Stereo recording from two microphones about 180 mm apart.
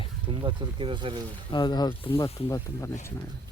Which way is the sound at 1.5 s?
25° left (ahead or behind).